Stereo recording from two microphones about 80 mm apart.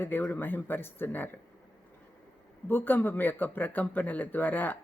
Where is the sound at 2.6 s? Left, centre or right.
Left.